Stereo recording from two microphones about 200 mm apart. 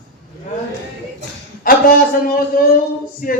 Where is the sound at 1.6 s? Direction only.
45° left (ahead or behind).